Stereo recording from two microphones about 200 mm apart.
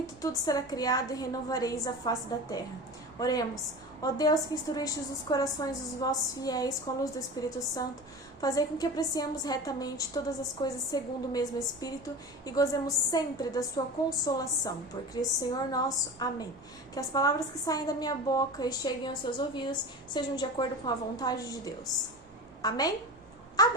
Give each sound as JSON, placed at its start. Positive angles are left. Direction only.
{"t": 0.2, "sound": "a woman's voice", "side_deg": 20}